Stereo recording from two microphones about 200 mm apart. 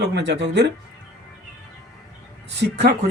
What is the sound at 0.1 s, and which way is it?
Speech, 60° right (ahead or behind).